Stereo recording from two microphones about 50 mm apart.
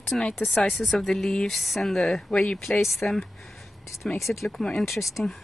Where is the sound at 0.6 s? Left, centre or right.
Centre.